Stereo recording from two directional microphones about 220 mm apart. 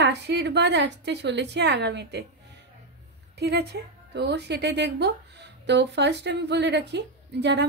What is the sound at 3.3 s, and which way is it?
Speech, 50° right (ahead or behind).